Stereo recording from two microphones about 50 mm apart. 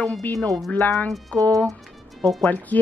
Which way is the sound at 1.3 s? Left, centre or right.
Left.